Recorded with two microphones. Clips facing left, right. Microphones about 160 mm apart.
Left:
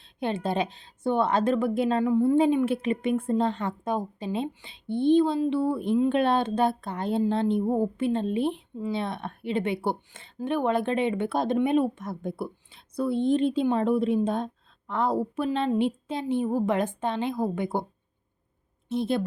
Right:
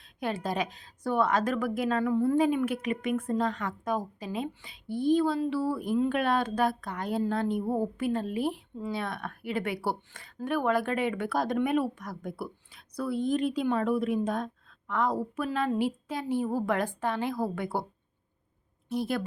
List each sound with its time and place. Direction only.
0.0 s a woman's voice: 25° left (ahead or behind)
18.9 s a woman's voice: 25° left (ahead or behind)